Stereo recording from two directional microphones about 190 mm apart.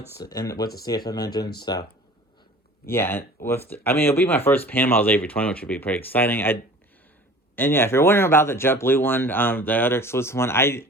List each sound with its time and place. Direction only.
0.2 s speech: 20° left (ahead or behind)
2.8 s speech: 10° left (ahead or behind)